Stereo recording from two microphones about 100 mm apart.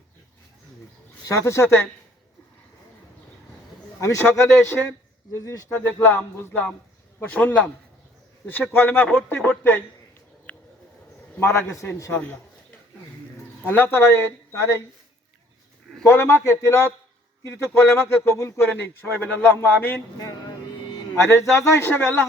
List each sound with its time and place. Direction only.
1.3 s speech: 30° left (ahead or behind)
4.0 s a man's voice: 30° left (ahead or behind)
5.6 s speech: 20° left (ahead or behind)
10.5 s a sound: 15° left (ahead or behind)
11.3 s speech: 25° left (ahead or behind)
12.1 s speech: 15° left (ahead or behind)
13.7 s speech: 20° left (ahead or behind)
16.0 s speech: 25° left (ahead or behind)
21.2 s speech: 25° left (ahead or behind)